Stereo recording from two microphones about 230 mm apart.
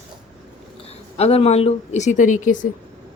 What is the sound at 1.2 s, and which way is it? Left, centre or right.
A woman's voice, left.